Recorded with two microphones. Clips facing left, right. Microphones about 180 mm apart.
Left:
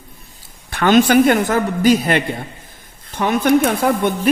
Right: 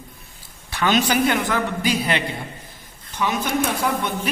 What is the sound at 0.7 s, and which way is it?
A man's voice, 50° left (ahead or behind).